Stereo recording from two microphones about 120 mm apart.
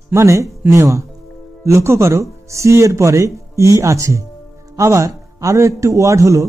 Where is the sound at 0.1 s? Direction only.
25° right (ahead or behind).